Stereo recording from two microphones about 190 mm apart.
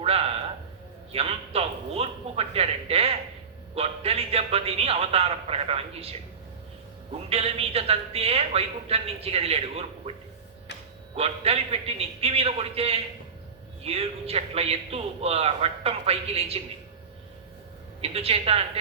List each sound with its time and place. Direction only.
0.0 s a sound: 30° right (ahead or behind)
1.1 s a man's voice: 35° right (ahead or behind)
7.3 s a woman's voice: 30° right (ahead or behind)
18.0 s a woman's voice: 30° right (ahead or behind)